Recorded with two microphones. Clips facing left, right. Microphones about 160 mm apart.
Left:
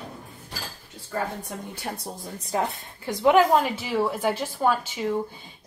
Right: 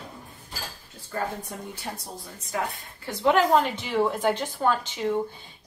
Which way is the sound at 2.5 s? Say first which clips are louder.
Left 3 dB; 30° left (ahead or behind).